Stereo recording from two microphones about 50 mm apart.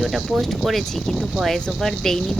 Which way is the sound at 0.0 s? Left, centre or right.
Centre.